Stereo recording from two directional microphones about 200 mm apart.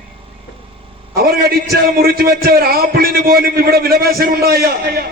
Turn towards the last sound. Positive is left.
turn(degrees=-50)  # may be behind; listen again after turning